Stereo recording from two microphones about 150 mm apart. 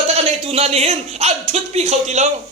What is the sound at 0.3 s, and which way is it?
A man's voice, 40° right (ahead or behind).